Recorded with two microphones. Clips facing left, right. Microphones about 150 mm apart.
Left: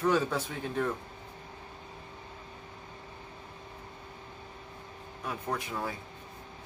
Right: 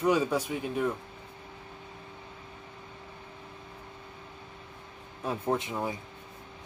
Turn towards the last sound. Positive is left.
turn(degrees=-20)  # may be behind; listen again after turning